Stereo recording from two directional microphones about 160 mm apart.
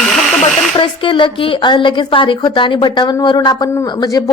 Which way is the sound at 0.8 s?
30° left (ahead or behind).